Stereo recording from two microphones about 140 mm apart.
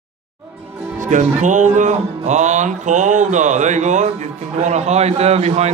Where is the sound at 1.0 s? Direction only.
60° right (ahead or behind).